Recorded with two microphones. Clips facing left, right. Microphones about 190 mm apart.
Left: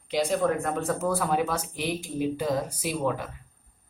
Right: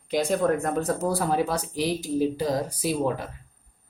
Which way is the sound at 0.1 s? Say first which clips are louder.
Right 2 dB; 45° right (ahead or behind).